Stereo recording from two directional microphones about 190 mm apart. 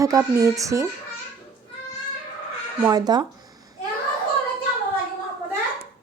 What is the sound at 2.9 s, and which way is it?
Speech, 20° right (ahead or behind).